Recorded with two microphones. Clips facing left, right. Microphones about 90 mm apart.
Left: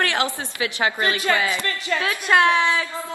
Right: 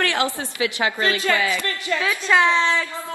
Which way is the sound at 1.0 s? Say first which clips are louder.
Right 2 dB; 20° left (ahead or behind).